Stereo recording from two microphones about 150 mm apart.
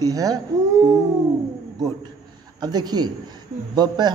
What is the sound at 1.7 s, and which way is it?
A man's voice, 25° right (ahead or behind).